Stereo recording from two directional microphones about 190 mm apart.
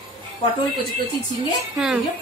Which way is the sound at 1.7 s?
5° right (ahead or behind).